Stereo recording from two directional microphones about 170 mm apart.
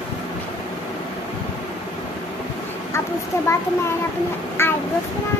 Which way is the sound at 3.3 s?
15° left (ahead or behind).